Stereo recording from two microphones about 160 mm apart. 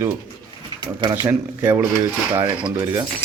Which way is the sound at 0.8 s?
25° right (ahead or behind).